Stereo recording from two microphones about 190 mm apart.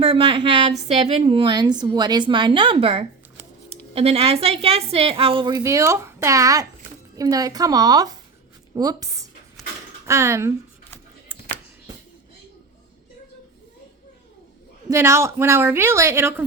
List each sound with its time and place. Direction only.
0.0 s a woman's voice: 25° right (ahead or behind)
14.8 s a woman's voice: 15° right (ahead or behind)